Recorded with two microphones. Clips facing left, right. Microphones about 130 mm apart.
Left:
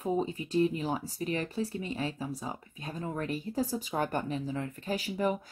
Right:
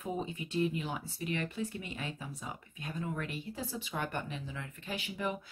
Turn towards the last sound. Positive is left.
turn(degrees=40)  # may be behind; listen again after turning